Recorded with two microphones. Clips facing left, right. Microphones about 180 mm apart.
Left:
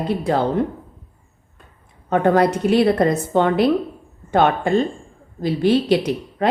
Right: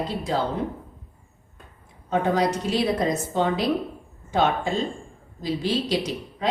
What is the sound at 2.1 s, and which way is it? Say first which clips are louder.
A woman's voice: left 6 dB; 60° left (ahead or behind).